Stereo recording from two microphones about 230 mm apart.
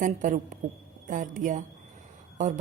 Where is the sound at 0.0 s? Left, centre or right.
Right.